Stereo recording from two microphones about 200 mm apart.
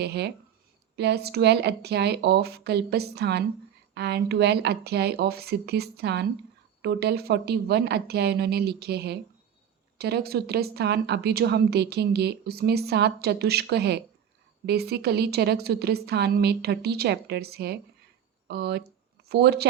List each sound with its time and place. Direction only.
0.0 s a woman's voice: 55° right (ahead or behind)